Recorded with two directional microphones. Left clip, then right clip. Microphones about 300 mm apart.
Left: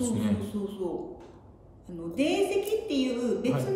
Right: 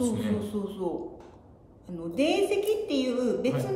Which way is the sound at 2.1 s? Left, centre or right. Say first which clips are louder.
Right 1 dB; centre.